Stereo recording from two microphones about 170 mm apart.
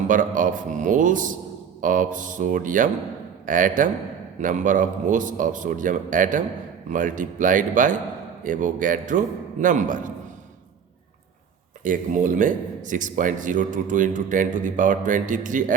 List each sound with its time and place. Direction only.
0.1 s a man's voice: 50° right (ahead or behind)
11.8 s speech: 50° right (ahead or behind)